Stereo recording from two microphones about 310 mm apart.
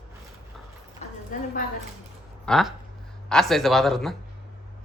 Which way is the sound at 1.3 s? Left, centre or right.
Left.